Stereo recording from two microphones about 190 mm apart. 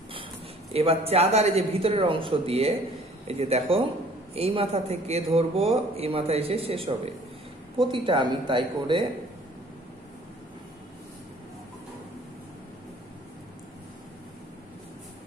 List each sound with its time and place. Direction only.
0.7 s a man's voice: 30° right (ahead or behind)